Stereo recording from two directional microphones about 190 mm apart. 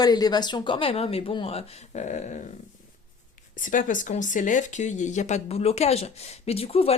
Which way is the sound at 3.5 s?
45° left (ahead or behind).